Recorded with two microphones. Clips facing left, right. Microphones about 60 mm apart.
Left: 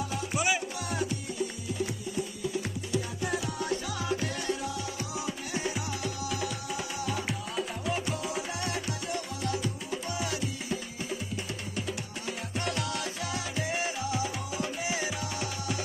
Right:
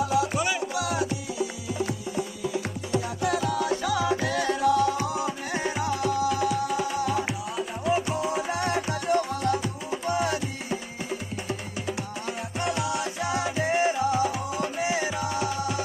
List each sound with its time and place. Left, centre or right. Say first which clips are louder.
0.0 s music: right 6 dB; right
3.2 s music: right 7 dB; right
4.9 s music: right 7 dB; right
7.2 s music: right 3 dB; centre
8.1 s music: right 6 dB; right
12.3 s music: right 4 dB; centre